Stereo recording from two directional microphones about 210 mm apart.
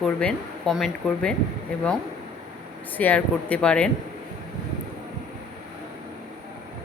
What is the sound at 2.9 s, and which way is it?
Speech, 5° left (ahead or behind).